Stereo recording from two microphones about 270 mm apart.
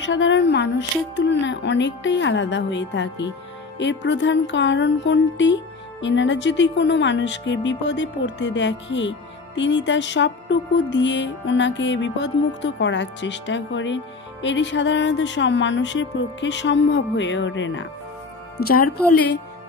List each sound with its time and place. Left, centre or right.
0.0 s speech: left